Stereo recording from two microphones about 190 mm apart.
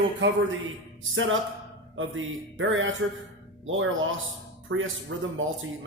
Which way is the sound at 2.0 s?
90° right.